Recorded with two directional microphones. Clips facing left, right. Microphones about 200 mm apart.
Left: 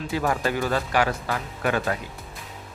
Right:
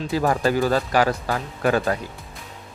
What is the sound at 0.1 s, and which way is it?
Speech, 35° right (ahead or behind).